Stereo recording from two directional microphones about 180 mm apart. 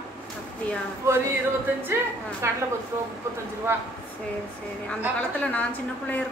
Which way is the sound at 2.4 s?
15° right (ahead or behind).